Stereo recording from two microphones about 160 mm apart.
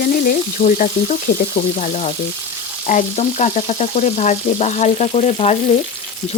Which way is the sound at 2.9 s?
50° left (ahead or behind).